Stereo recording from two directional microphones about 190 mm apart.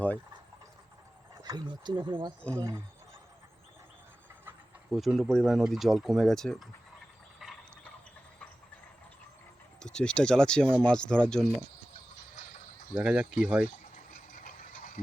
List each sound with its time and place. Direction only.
1.4 s speech: 20° right (ahead or behind)
4.9 s speech: centre (ahead or behind)
7.4 s fill: centre (ahead or behind)
9.8 s speech: 5° left (ahead or behind)
12.9 s speech: 5° right (ahead or behind)
14.1 s ratchet: 45° left (ahead or behind)